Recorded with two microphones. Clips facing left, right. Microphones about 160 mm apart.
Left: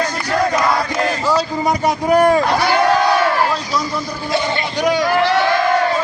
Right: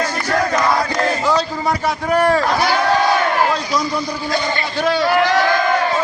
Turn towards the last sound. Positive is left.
turn(degrees=15)  # may be behind; listen again after turning